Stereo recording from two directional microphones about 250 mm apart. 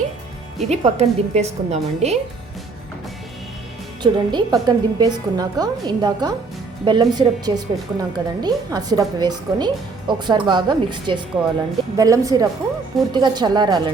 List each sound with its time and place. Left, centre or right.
0.7 s a woman's voice: right
4.0 s a woman's voice: centre